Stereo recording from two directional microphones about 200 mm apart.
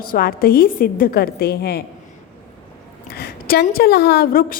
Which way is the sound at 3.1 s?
50° left (ahead or behind).